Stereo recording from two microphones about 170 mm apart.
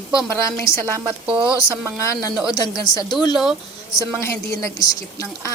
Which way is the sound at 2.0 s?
15° left (ahead or behind).